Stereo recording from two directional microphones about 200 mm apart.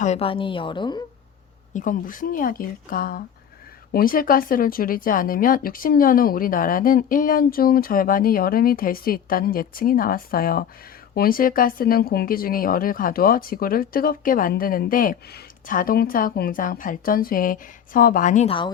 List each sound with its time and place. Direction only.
0.0 s a woman's voice: 30° left (ahead or behind)
1.7 s speech: 40° left (ahead or behind)